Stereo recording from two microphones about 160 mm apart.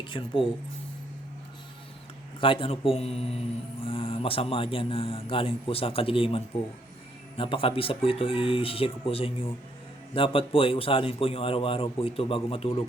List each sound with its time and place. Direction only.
0.1 s a man's voice: 30° left (ahead or behind)
2.4 s a man's voice: 35° left (ahead or behind)